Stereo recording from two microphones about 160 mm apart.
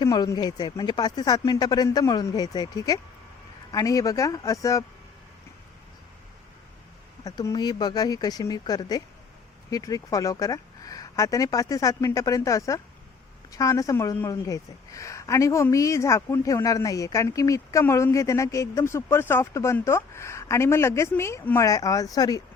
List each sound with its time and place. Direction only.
0.0 s a woman's voice: 25° left (ahead or behind)
7.3 s a woman's voice: 25° left (ahead or behind)